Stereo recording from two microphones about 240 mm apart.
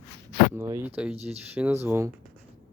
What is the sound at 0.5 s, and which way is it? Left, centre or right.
Speech, centre.